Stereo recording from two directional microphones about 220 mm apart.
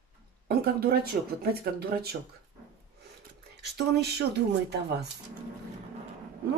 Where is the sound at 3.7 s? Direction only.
50° right (ahead or behind).